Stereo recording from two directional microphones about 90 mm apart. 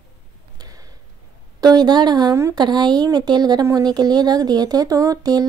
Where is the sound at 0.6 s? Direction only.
45° right (ahead or behind).